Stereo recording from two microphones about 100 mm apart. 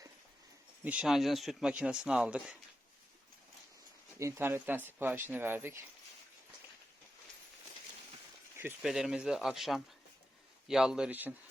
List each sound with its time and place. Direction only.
0.9 s speech: 5° right (ahead or behind)
4.2 s speech: 25° right (ahead or behind)
8.8 s speech: 5° right (ahead or behind)